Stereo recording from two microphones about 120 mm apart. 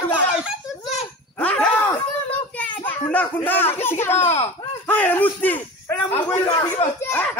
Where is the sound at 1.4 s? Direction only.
10° left (ahead or behind).